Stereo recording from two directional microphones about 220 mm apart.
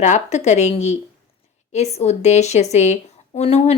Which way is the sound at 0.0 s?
30° left (ahead or behind).